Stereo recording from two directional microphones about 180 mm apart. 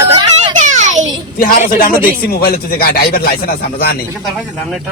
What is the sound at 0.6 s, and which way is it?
Child singing, 45° right (ahead or behind).